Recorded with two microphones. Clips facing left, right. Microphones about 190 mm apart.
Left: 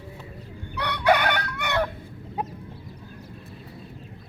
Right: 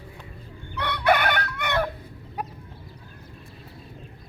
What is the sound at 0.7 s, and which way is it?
Crowing, 10° left (ahead or behind).